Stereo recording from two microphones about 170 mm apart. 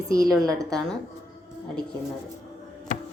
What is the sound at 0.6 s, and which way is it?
Speech, centre (ahead or behind).